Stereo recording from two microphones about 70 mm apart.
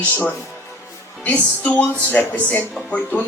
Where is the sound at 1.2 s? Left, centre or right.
Left.